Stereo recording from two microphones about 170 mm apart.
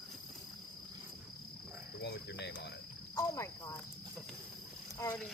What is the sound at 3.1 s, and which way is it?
Speech, 15° left (ahead or behind).